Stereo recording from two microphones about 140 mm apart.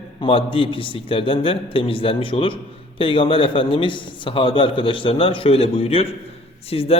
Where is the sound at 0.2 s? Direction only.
40° left (ahead or behind).